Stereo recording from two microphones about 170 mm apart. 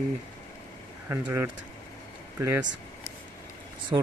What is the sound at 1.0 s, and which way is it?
Speech, 15° right (ahead or behind).